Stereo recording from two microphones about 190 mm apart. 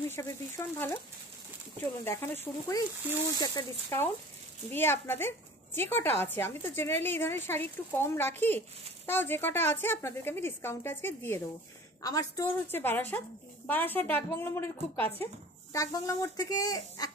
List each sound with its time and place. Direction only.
0.2 s a woman's voice: 15° left (ahead or behind)
2.0 s a woman's voice: 10° left (ahead or behind)